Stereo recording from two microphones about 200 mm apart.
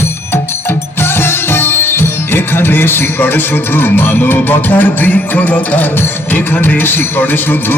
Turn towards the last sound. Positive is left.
turn(degrees=10)  # may be behind; listen again after turning